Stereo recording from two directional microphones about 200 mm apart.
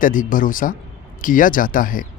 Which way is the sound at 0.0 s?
40° left (ahead or behind).